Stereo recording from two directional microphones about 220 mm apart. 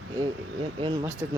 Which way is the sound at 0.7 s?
20° right (ahead or behind).